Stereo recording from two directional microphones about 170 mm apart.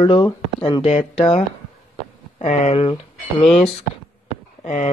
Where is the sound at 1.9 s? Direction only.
45° left (ahead or behind).